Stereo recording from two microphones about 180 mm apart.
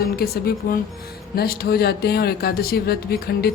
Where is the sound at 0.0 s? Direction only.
55° left (ahead or behind).